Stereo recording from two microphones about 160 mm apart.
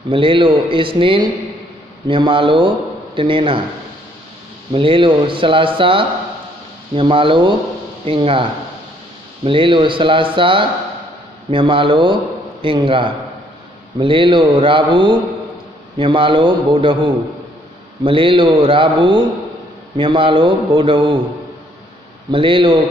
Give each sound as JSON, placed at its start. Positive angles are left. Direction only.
{"t": 0.1, "sound": "speech", "side_deg": -35}
{"t": 4.7, "sound": "speech", "side_deg": -35}
{"t": 22.3, "sound": "speech", "side_deg": -35}